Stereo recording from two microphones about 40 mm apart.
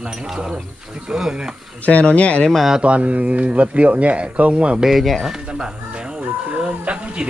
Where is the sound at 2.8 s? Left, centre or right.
Right.